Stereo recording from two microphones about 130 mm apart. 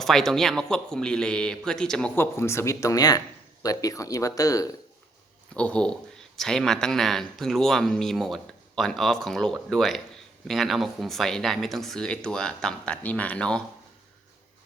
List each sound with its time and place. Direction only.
0.0 s a man's voice: 5° left (ahead or behind)
2.1 s speech: 20° left (ahead or behind)
5.5 s a man's voice: 10° left (ahead or behind)